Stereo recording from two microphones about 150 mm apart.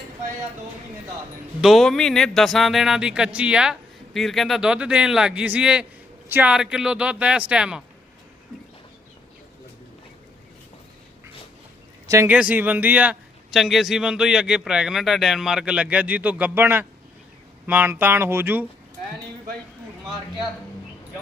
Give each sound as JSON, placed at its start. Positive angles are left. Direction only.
{"t": 1.6, "sound": "a man's voice", "side_deg": 0}
{"t": 12.0, "sound": "speech", "side_deg": -20}
{"t": 12.3, "sound": "a man's voice", "side_deg": -10}